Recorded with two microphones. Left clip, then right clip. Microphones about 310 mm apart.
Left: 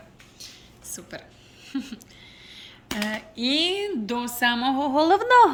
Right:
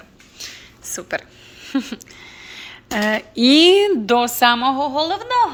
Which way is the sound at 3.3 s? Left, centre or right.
Centre.